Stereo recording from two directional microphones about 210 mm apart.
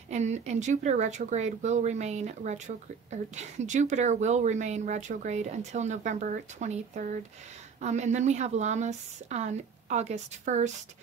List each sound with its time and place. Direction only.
0.1 s speech: 35° right (ahead or behind)